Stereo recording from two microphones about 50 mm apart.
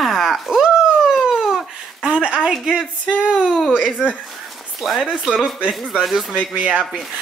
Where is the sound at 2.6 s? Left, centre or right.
Centre.